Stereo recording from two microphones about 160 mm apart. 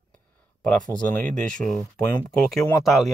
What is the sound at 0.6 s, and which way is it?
Speech, 5° left (ahead or behind).